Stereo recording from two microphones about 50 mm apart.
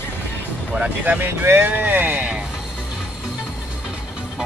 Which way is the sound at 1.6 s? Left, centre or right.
Right.